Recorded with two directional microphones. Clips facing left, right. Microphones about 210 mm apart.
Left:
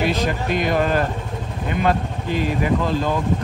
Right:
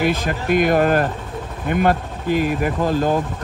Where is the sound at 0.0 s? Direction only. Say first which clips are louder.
Right 1 dB; 50° right (ahead or behind).